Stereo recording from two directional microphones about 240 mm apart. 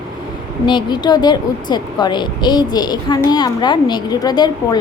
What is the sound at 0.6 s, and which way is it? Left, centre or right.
Speech, centre.